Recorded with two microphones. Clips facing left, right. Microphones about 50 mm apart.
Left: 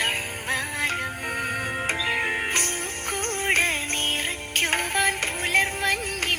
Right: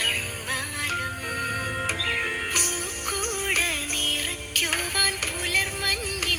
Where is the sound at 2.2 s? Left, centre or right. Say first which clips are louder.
Left 2 dB; left.